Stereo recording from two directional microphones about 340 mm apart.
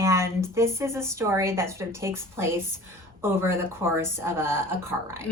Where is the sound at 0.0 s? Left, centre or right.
Centre.